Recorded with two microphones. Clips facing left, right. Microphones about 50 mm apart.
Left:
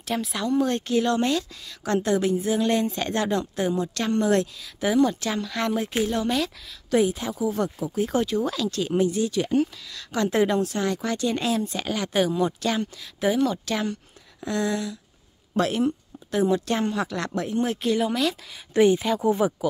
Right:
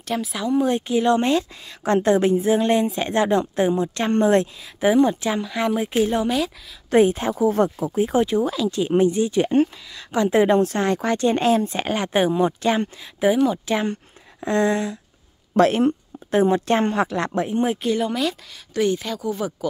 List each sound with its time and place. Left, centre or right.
0.0 s speech: centre
0.5 s a woman's voice: centre
6.9 s speech: right
7.6 s speech: right
8.0 s a woman's voice: centre
10.6 s speech: right
13.2 s speech: centre
14.4 s speech: right
17.3 s a woman's voice: right
17.8 s speech: centre
18.7 s speech: centre